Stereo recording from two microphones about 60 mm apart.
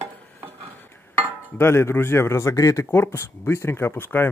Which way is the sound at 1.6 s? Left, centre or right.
Left.